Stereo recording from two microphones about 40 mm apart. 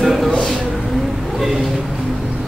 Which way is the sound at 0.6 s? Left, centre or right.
Centre.